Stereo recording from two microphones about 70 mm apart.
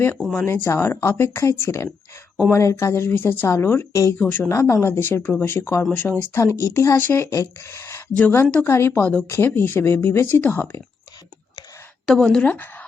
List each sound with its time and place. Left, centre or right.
0.2 s speech: centre
0.4 s a woman's voice: left
4.4 s speech: left
5.9 s a woman's voice: left
6.3 s a woman's voice: left
6.9 s speech: left
8.1 s a woman's voice: left
8.6 s speech: left
8.9 s a woman's voice: left
12.0 s a woman's voice: centre
12.4 s a woman's voice: left